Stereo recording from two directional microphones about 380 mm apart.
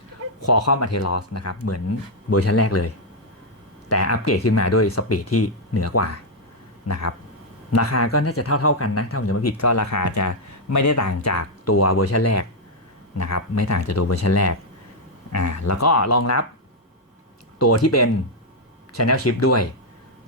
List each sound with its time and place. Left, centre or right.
0.4 s speech: left
17.6 s speech: left